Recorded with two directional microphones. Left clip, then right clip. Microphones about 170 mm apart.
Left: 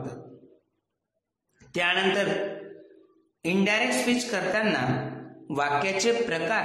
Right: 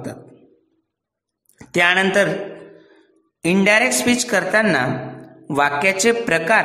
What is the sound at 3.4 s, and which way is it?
A man's voice, 45° right (ahead or behind).